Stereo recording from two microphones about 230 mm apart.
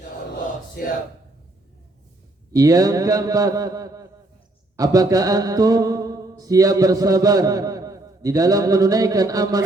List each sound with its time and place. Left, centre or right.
2.5 s mantra: centre